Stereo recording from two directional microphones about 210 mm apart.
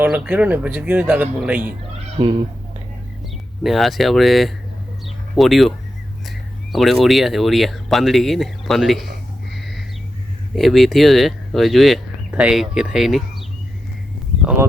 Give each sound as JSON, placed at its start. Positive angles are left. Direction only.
{"t": 0.0, "sound": "speech", "side_deg": -10}
{"t": 2.2, "sound": "speech", "side_deg": -25}
{"t": 3.6, "sound": "speech", "side_deg": 0}
{"t": 5.0, "sound": "a sound", "side_deg": 0}
{"t": 6.7, "sound": "speech", "side_deg": 0}
{"t": 9.6, "sound": "a sound", "side_deg": 0}
{"t": 10.5, "sound": "speech", "side_deg": 0}